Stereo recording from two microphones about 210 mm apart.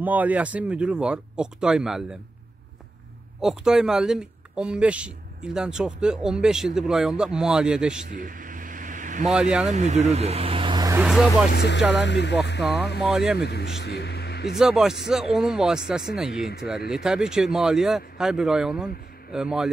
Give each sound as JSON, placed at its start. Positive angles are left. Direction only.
{"t": 0.0, "sound": "speech", "side_deg": -10}
{"t": 3.3, "sound": "speech", "side_deg": 0}
{"t": 8.1, "sound": "vehicle", "side_deg": -40}
{"t": 9.3, "sound": "speech", "side_deg": 0}
{"t": 9.7, "sound": "speech", "side_deg": -35}
{"t": 11.5, "sound": "speech", "side_deg": 55}
{"t": 13.0, "sound": "speech", "side_deg": 0}
{"t": 13.4, "sound": "speech", "side_deg": 50}
{"t": 14.6, "sound": "speech", "side_deg": 0}